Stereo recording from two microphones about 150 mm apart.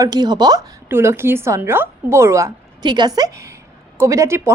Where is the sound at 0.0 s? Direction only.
25° right (ahead or behind).